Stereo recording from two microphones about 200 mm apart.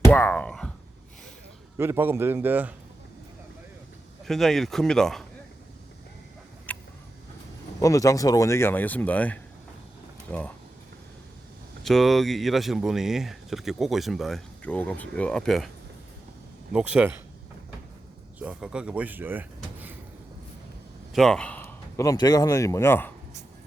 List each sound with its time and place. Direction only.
0.1 s speech: 10° left (ahead or behind)
1.8 s a man's voice: 10° right (ahead or behind)
4.3 s speech: centre (ahead or behind)
6.7 s a sound: 5° left (ahead or behind)
7.8 s speech: 15° left (ahead or behind)
11.8 s speech: centre (ahead or behind)
16.7 s a man's voice: 5° right (ahead or behind)
18.3 s speech: 5° right (ahead or behind)
21.1 s a man's voice: centre (ahead or behind)